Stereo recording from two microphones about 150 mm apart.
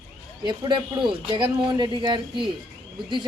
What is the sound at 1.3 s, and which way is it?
A man's voice, 30° right (ahead or behind).